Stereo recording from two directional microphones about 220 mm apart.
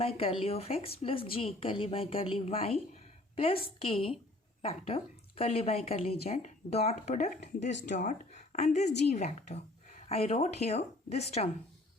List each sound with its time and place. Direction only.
0.0 s speech: 25° left (ahead or behind)